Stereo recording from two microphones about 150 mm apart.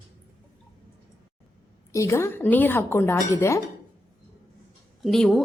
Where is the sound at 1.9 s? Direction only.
20° left (ahead or behind).